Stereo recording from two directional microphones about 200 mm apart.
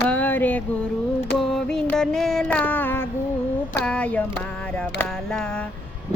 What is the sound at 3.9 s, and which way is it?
Music, 5° left (ahead or behind).